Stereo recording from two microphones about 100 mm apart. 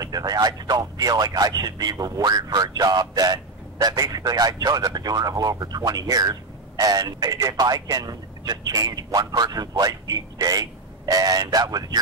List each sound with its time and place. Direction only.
0.0 s speech: 40° right (ahead or behind)